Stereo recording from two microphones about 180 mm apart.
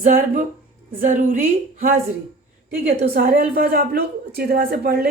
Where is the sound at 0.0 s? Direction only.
45° right (ahead or behind).